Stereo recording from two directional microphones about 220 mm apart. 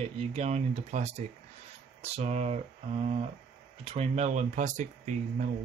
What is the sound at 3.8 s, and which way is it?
Speech, 30° right (ahead or behind).